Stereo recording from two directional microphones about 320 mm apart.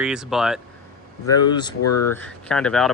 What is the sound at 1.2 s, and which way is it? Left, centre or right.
Speech, centre.